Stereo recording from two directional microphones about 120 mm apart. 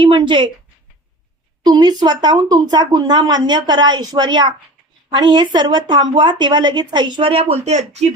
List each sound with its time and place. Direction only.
0.0 s speech: 45° right (ahead or behind)
1.6 s speech: 35° right (ahead or behind); by 8.0 s 65° right (ahead or behind)